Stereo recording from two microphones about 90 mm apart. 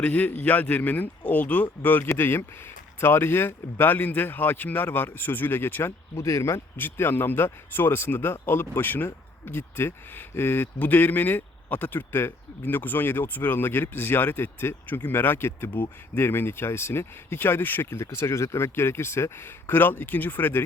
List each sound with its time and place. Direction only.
0.0 s speech: 15° left (ahead or behind)